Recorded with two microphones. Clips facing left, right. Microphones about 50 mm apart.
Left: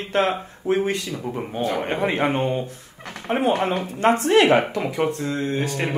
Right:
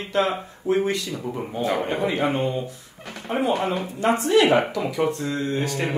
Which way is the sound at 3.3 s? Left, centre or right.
Left.